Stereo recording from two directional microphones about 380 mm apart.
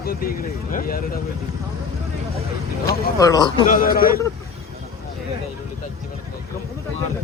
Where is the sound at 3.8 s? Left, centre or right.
Left.